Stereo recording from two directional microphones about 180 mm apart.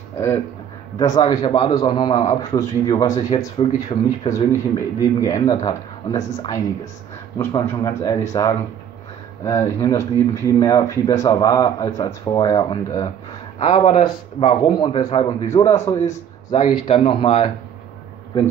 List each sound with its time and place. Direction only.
0.1 s speech: 15° left (ahead or behind)
3.5 s speech: 30° left (ahead or behind)
4.3 s speech: 15° left (ahead or behind)
13.6 s speech: 40° left (ahead or behind); by 16.5 s 20° left (ahead or behind)
16.8 s speech: 35° left (ahead or behind)